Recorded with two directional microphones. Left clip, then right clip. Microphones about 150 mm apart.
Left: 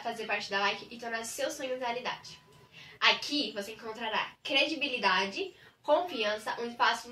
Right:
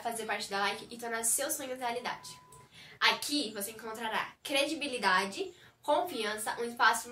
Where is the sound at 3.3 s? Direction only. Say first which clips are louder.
Left 2 dB; 20° right (ahead or behind).